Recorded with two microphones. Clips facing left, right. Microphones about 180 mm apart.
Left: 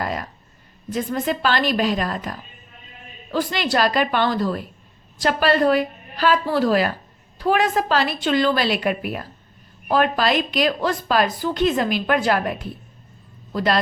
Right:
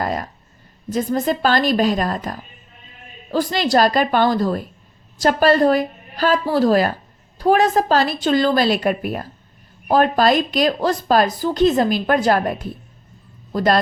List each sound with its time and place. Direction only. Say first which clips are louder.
0.0 s a woman's voice: right 3 dB; 40° right (ahead or behind)
3.3 s a woman's voice: right 4 dB; 40° right (ahead or behind)